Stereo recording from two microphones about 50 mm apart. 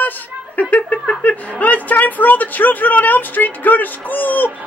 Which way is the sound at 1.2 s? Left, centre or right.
Left.